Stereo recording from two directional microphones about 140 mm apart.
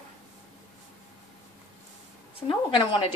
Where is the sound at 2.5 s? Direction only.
35° left (ahead or behind).